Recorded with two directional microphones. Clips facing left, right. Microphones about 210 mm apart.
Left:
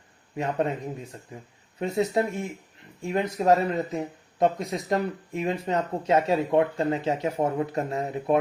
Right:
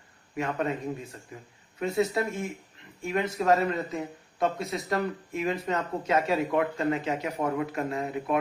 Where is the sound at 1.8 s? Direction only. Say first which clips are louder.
Left 2 dB; 30° left (ahead or behind).